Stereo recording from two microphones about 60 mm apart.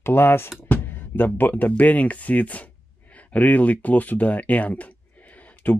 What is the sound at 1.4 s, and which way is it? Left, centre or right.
Speech, left.